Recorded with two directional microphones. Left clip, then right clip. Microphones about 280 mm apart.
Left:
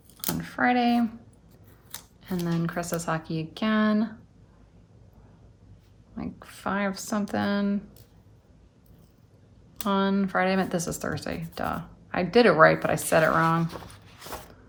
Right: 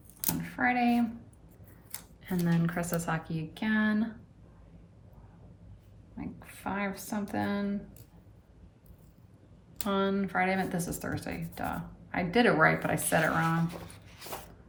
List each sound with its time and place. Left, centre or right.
0.3 s a sound: centre
1.9 s speech: centre
6.1 s speech: centre
9.7 s speech: centre